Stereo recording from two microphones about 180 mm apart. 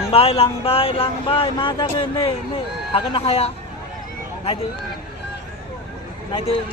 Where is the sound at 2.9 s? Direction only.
35° left (ahead or behind).